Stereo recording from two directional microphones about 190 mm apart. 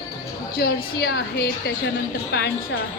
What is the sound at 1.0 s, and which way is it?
Speech, 60° left (ahead or behind).